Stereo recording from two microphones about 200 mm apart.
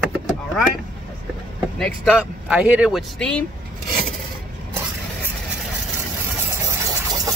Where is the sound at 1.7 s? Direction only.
Centre (ahead or behind).